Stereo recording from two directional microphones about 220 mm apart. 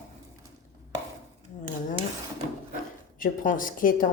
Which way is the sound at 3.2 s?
35° left (ahead or behind).